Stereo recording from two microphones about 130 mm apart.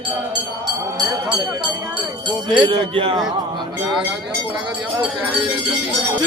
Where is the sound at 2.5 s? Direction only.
40° right (ahead or behind).